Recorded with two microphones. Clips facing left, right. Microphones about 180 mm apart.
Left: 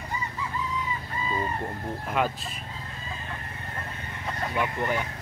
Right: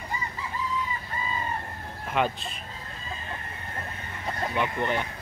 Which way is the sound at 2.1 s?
Centre (ahead or behind).